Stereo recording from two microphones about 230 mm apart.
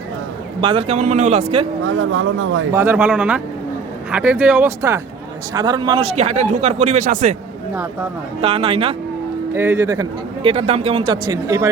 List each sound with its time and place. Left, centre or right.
0.6 s a man's voice: right
1.8 s speech: right
2.7 s a man's voice: centre; by 7.3 s right
8.4 s a man's voice: right
9.6 s a man's voice: centre